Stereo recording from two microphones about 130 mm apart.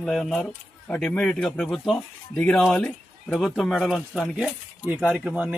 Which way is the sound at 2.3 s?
15° left (ahead or behind).